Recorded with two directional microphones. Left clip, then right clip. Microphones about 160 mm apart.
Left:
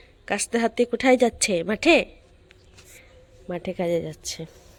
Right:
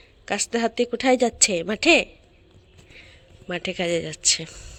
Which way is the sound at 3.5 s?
5° left (ahead or behind).